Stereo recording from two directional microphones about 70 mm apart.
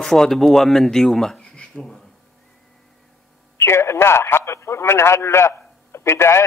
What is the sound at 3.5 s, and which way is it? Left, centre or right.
A man's voice, left.